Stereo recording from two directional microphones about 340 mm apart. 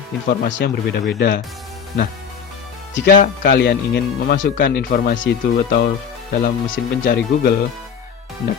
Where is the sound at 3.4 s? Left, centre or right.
Left.